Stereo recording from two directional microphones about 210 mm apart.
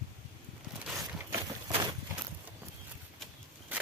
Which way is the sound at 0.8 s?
10° right (ahead or behind).